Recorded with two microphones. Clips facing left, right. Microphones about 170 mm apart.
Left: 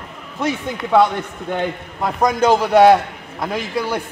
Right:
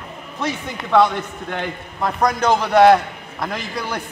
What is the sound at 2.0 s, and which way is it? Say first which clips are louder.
A man's voice: left 2 dB; 5° left (ahead or behind).